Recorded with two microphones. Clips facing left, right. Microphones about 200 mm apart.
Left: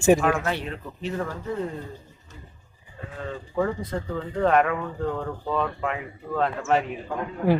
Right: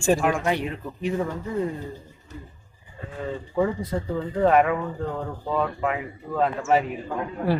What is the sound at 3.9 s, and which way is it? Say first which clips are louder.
Speech: right 2 dB; 5° right (ahead or behind).